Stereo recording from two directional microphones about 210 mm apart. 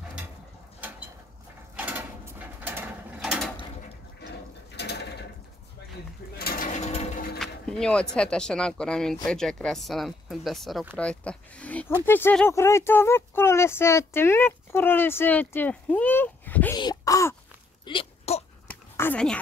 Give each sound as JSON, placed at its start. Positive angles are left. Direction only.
{"t": 1.8, "sound": "mechanisms", "side_deg": -10}
{"t": 4.8, "sound": "mechanisms", "side_deg": 55}
{"t": 6.3, "sound": "sewing machine", "side_deg": 45}
{"t": 7.3, "sound": "speech", "side_deg": 5}
{"t": 16.7, "sound": "groan", "side_deg": 20}
{"t": 17.8, "sound": "a sound", "side_deg": 25}
{"t": 18.7, "sound": "dog", "side_deg": 10}